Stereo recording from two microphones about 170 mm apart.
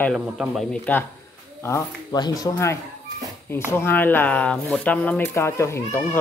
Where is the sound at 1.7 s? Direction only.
25° left (ahead or behind).